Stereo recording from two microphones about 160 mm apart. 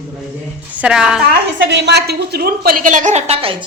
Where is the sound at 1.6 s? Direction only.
90° right; by 3.6 s 35° right (ahead or behind).